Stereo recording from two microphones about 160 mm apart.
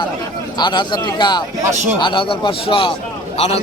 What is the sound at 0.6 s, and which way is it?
A man's voice, 30° left (ahead or behind).